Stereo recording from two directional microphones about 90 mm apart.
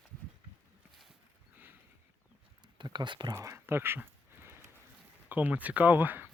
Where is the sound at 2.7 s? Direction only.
55° right (ahead or behind).